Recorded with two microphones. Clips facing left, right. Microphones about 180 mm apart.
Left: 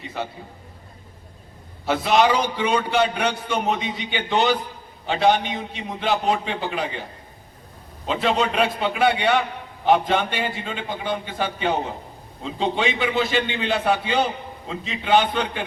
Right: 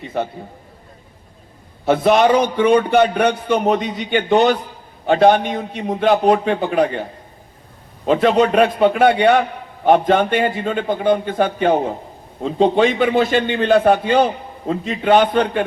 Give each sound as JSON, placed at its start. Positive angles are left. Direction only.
{"t": 0.0, "sound": "a man's voice", "side_deg": -55}
{"t": 1.8, "sound": "a man's voice", "side_deg": -55}
{"t": 8.0, "sound": "a man's voice", "side_deg": -50}